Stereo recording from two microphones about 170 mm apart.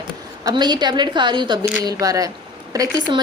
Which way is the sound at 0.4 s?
25° right (ahead or behind).